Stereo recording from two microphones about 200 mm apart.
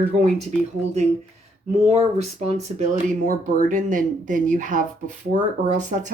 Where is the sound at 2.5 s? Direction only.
35° right (ahead or behind).